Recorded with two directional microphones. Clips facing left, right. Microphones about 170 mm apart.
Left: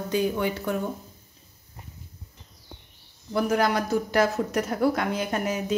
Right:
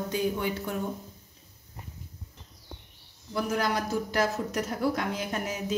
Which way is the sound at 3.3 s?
65° left (ahead or behind).